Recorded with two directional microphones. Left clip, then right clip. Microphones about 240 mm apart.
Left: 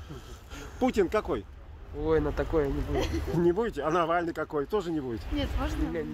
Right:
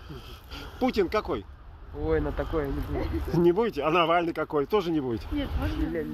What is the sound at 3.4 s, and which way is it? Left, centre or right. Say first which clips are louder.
Speech: right 4 dB; centre.